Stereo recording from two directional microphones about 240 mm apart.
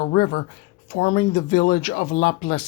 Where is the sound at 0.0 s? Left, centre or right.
Left.